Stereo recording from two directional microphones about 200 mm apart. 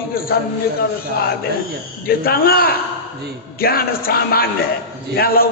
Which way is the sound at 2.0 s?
50° left (ahead or behind).